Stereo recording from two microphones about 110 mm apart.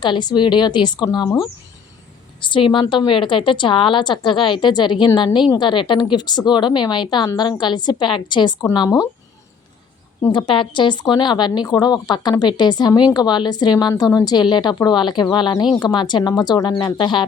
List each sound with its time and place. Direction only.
0.0 s a woman's voice: 45° left (ahead or behind)
2.4 s a woman's voice: 50° left (ahead or behind)
10.3 s a woman's voice: 45° left (ahead or behind)